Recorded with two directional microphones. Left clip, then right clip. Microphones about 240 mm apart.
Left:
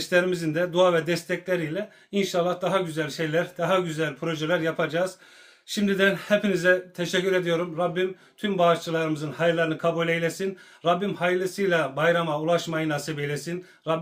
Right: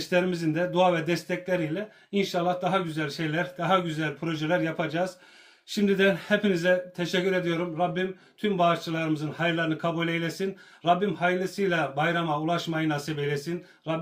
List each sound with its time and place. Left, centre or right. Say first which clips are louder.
0.1 s a man's voice: left 3 dB; left